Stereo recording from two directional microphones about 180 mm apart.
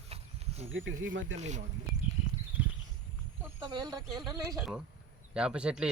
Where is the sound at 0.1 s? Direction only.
35° right (ahead or behind).